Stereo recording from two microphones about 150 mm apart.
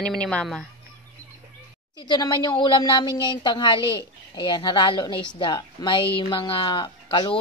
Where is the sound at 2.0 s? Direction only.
30° left (ahead or behind).